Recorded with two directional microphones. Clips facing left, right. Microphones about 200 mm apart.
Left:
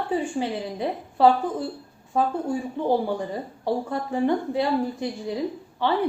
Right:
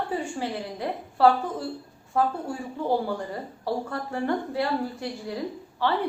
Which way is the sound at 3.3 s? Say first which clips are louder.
Left 3 dB; 20° left (ahead or behind).